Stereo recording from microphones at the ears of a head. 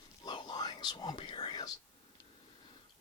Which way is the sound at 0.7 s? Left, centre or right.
Left.